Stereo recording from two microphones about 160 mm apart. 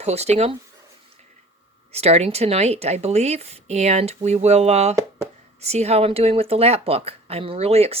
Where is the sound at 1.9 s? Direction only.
40° right (ahead or behind).